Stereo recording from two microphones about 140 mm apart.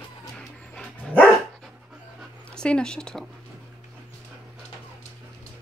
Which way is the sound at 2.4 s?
5° left (ahead or behind).